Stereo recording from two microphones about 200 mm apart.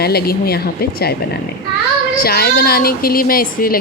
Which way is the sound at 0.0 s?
50° left (ahead or behind).